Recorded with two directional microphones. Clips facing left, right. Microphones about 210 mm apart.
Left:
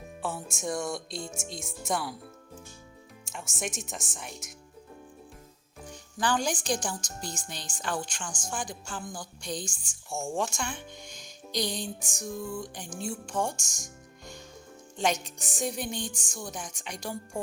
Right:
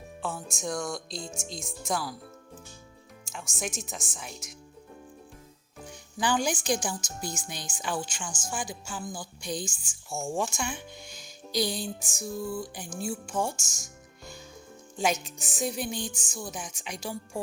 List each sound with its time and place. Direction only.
0.2 s speech: 5° left (ahead or behind)
3.3 s speech: centre (ahead or behind)
5.9 s a woman's voice: 10° right (ahead or behind)